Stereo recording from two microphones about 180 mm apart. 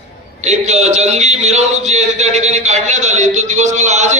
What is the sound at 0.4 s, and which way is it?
A man's voice, 40° right (ahead or behind).